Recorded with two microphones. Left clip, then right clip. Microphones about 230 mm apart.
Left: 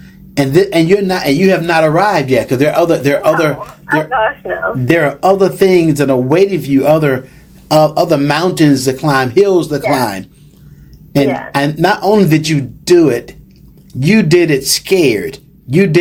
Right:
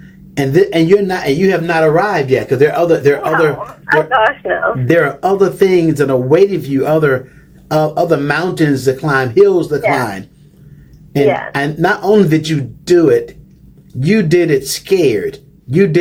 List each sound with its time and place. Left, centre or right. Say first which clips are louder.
0.3 s a man's voice: left 1 dB; centre
4.1 s speech: right 2 dB; right
4.9 s speech: left 3 dB; centre
11.3 s speech: right 3 dB; right
11.5 s speech: left 2 dB; centre